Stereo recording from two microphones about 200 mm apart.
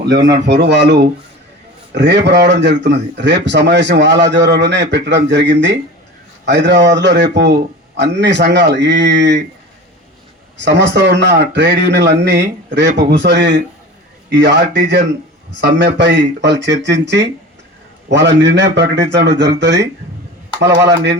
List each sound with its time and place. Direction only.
0.3 s speech: 60° right (ahead or behind)
2.0 s speech: 60° right (ahead or behind)
10.6 s speech: 60° right (ahead or behind)